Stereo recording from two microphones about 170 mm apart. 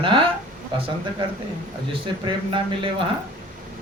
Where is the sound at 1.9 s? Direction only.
30° right (ahead or behind).